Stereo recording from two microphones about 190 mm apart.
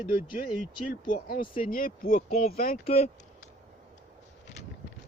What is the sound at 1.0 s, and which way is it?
A man's voice, 45° left (ahead or behind).